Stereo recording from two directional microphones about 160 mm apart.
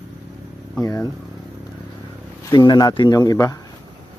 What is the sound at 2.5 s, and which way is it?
Speech, 25° left (ahead or behind).